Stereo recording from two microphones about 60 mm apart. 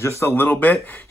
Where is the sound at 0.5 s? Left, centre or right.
Left.